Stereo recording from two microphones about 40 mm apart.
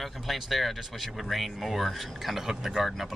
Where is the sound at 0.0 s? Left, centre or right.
Centre.